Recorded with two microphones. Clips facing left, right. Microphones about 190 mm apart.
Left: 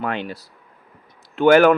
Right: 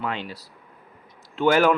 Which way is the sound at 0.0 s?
55° left (ahead or behind).